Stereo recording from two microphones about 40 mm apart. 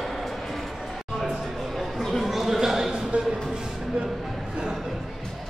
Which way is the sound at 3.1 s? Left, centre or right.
Right.